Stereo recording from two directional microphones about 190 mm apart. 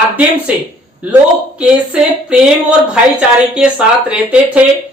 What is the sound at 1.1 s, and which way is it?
Speech, 5° right (ahead or behind).